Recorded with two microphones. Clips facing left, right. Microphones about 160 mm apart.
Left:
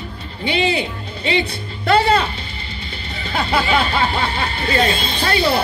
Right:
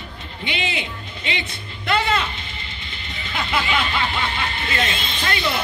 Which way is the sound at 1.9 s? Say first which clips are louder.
Left 6 dB; 35° left (ahead or behind).